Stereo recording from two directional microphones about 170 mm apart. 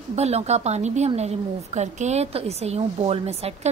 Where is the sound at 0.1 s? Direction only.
40° right (ahead or behind).